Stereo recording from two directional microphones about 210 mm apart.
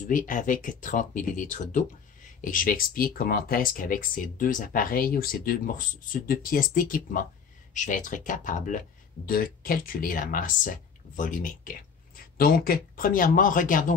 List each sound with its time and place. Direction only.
0.0 s speech: 35° left (ahead or behind)